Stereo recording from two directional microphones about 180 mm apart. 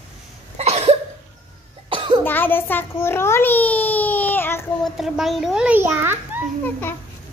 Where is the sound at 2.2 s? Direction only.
10° left (ahead or behind).